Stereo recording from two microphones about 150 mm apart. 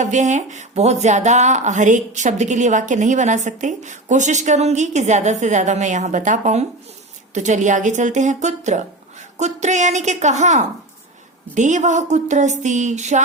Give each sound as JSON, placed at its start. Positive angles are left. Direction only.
{"t": 0.0, "sound": "speech", "side_deg": -55}